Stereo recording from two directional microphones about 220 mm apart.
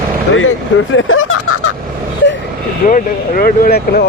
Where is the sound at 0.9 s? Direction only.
65° left (ahead or behind).